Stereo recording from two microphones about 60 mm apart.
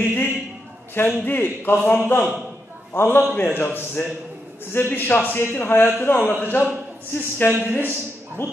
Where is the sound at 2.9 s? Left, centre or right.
Left.